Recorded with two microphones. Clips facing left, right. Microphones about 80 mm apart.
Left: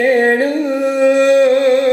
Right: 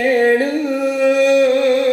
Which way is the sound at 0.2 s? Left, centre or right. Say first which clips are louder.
Left 1 dB; left.